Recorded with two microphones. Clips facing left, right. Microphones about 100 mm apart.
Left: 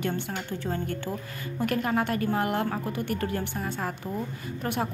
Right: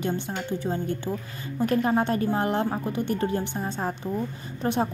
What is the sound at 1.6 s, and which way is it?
A woman's voice, 25° right (ahead or behind).